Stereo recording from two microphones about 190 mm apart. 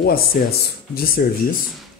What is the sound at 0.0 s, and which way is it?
Speech, 50° left (ahead or behind).